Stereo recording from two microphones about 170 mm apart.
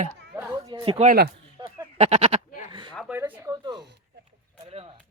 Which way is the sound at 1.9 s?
40° right (ahead or behind).